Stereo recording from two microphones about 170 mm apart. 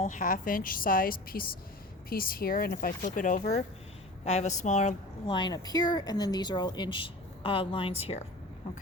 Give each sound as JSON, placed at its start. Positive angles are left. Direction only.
{"t": 0.0, "sound": "a woman's voice", "side_deg": 50}
{"t": 5.2, "sound": "speech", "side_deg": 25}